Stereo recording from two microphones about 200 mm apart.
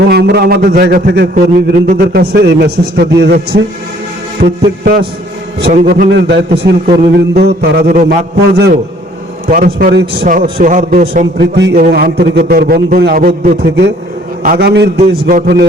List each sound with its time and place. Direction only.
0.1 s a man's voice: 55° right (ahead or behind)
4.4 s a man's voice: 35° right (ahead or behind)
5.7 s a man's voice: 45° right (ahead or behind)
11.3 s a man's voice: 60° right (ahead or behind)